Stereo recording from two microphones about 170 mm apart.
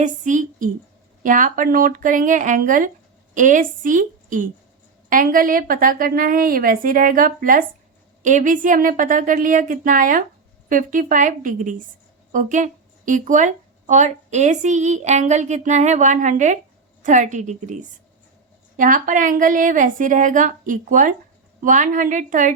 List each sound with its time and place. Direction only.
0.0 s a woman's voice: 45° right (ahead or behind)